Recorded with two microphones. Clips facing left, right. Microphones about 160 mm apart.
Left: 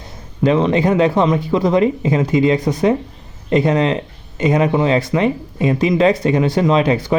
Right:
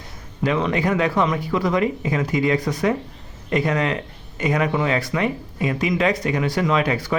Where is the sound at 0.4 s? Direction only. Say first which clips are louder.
Left 6 dB; 25° left (ahead or behind).